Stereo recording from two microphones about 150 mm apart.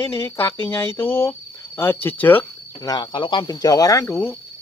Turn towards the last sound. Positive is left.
turn(degrees=20)  # may be behind; listen again after turning